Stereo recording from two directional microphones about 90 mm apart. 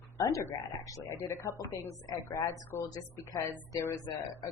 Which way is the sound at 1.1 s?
30° left (ahead or behind).